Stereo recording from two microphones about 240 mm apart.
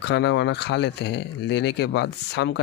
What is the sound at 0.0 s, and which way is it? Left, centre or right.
Speech, left.